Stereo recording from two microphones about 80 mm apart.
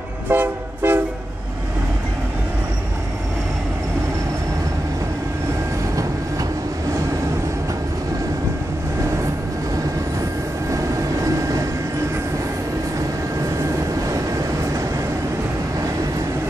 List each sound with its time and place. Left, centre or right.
0.3 s train: right
11.2 s vehicle: right